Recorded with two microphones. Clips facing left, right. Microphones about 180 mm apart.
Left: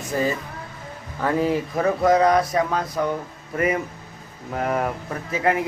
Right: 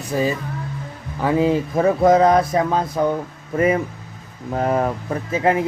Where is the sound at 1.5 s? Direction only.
25° right (ahead or behind).